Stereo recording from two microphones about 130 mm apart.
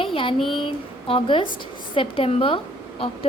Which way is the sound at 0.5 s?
40° left (ahead or behind).